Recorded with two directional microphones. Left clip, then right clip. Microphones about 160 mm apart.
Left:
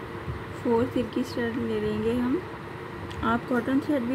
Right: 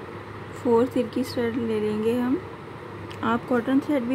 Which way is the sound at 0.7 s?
20° right (ahead or behind).